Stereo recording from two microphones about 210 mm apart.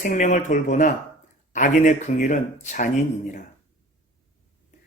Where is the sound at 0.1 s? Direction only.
40° left (ahead or behind).